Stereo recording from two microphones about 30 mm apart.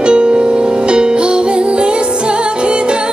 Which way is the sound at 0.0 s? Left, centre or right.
Right.